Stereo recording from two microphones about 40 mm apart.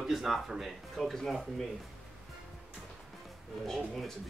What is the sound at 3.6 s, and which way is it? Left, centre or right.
Speech, centre.